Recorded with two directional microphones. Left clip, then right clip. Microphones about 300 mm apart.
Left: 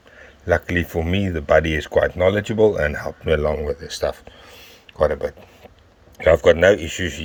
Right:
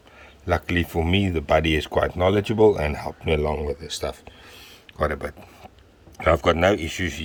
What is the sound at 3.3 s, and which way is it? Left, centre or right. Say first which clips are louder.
Speech: left 4 dB; centre.